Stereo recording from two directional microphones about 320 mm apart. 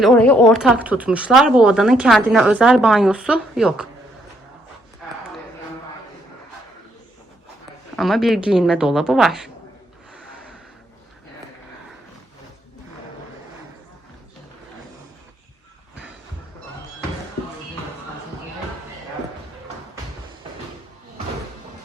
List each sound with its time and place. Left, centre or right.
0.0 s speech: centre
5.0 s a sound: centre
7.9 s speech: centre